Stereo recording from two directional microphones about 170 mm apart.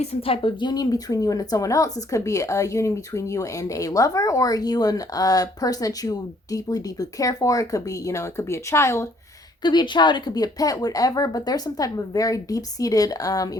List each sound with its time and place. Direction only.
0.0 s speech: 35° left (ahead or behind); by 9.0 s 15° left (ahead or behind)
9.6 s speech: 25° left (ahead or behind)